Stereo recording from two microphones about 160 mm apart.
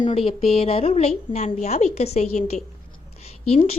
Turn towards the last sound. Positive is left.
turn(degrees=40)  # may be behind; listen again after turning